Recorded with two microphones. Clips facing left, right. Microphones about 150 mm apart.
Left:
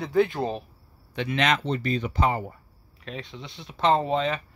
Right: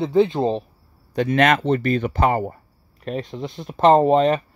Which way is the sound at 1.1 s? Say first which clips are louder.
Right 7 dB; 45° right (ahead or behind).